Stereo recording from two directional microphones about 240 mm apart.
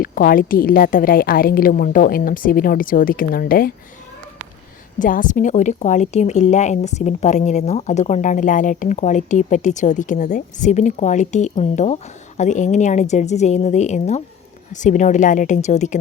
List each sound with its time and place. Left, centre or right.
0.0 s a woman's voice: left
4.9 s a woman's voice: left